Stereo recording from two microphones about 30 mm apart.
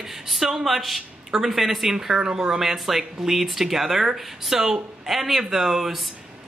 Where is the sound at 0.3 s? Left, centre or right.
Centre.